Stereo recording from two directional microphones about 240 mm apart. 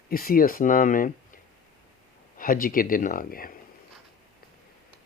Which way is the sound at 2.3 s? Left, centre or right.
Left.